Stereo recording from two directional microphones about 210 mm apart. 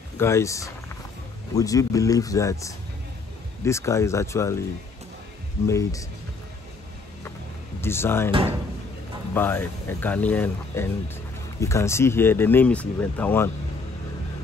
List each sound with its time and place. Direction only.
0.2 s speech: 15° left (ahead or behind)
5.7 s speech: 15° left (ahead or behind)
7.8 s speech: 10° left (ahead or behind)
9.3 s speech: 10° left (ahead or behind)